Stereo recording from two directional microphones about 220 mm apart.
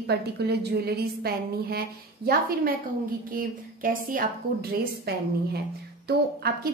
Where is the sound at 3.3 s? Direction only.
40° right (ahead or behind).